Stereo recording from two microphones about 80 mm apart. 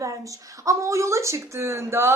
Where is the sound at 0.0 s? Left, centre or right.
Right.